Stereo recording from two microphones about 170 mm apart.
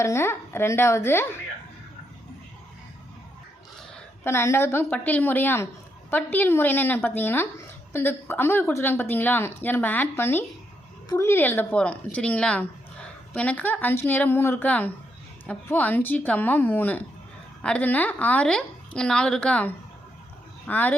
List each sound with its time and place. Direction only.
0.0 s a woman's voice: 15° left (ahead or behind)
4.2 s a woman's voice: 15° left (ahead or behind)